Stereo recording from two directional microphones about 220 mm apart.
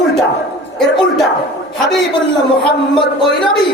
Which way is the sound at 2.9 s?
20° left (ahead or behind).